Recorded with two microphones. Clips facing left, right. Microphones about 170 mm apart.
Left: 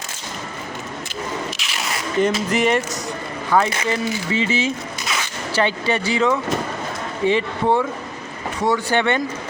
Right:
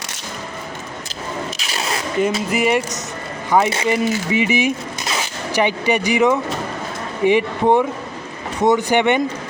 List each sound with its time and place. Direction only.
2.2 s speech: 5° right (ahead or behind)